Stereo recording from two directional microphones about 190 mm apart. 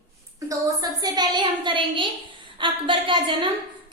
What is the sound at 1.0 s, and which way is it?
A woman's voice, 20° right (ahead or behind).